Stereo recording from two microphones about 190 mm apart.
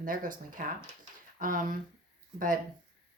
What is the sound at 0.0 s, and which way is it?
Speech, 45° right (ahead or behind).